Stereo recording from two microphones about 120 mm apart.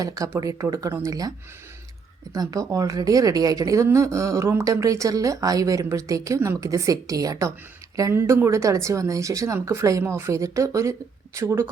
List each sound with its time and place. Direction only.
0.0 s speech: 30° right (ahead or behind)
2.3 s speech: 30° right (ahead or behind)